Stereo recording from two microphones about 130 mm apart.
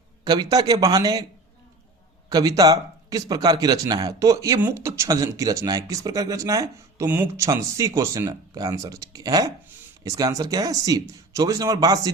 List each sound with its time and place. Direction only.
0.3 s speech: 30° right (ahead or behind)
2.3 s speech: 30° right (ahead or behind)